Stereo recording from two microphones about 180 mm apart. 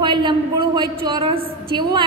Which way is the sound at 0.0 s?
25° right (ahead or behind).